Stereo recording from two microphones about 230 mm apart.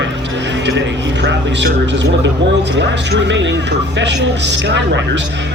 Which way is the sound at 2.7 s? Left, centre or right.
Right.